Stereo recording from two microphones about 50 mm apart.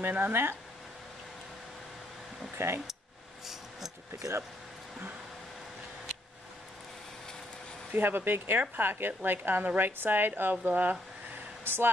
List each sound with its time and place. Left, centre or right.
0.0 s a woman's voice: right
2.6 s speech: right
7.9 s a woman's voice: right
11.6 s speech: right